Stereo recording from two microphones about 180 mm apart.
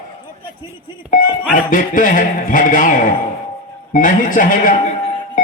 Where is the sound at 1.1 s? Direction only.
50° left (ahead or behind).